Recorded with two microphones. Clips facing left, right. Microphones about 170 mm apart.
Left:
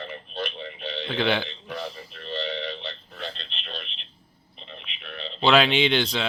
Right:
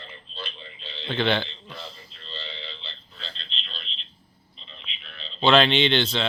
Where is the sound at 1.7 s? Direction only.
65° left (ahead or behind).